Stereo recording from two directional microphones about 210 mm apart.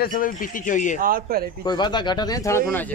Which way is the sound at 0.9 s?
45° right (ahead or behind).